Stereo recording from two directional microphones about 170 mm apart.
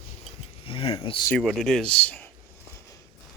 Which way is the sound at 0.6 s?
35° left (ahead or behind).